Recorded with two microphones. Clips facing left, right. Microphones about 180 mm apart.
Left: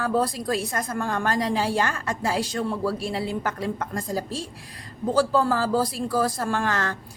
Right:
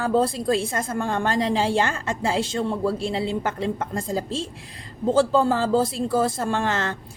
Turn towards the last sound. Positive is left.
turn(degrees=-25)  # may be behind; listen again after turning